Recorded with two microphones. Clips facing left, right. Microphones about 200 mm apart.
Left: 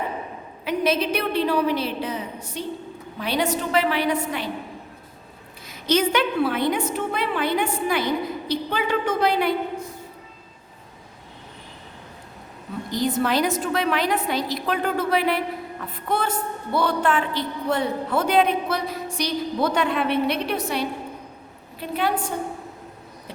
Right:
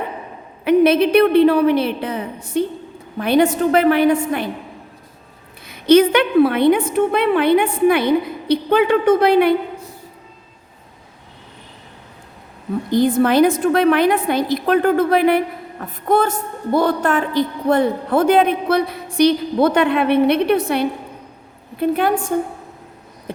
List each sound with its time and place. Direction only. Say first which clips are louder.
0.6 s a woman's voice: right 10 dB; 60° right (ahead or behind)
5.6 s a woman's voice: right 10 dB; 60° right (ahead or behind)
12.9 s a woman's voice: right 8 dB; 55° right (ahead or behind)